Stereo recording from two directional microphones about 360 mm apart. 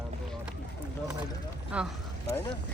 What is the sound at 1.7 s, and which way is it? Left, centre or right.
Speech, centre.